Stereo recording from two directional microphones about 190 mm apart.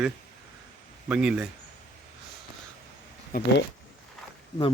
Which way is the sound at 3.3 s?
50° left (ahead or behind).